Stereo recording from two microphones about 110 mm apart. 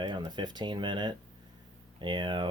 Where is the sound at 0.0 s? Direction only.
40° right (ahead or behind).